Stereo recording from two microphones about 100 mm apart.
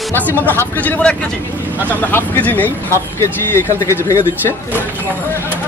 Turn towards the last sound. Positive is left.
turn(degrees=30)  # may be behind; listen again after turning